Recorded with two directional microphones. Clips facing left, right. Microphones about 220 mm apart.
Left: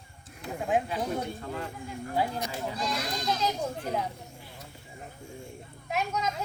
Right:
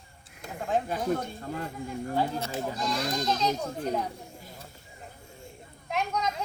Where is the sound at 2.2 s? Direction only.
15° left (ahead or behind).